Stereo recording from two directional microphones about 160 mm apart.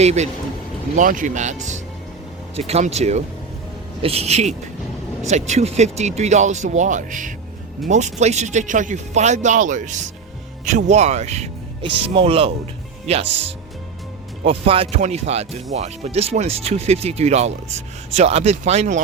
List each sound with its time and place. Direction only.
0.0 s speech: 45° right (ahead or behind)
0.9 s speech: 55° right (ahead or behind); by 12.5 s 35° right (ahead or behind)
14.4 s speech: 35° right (ahead or behind)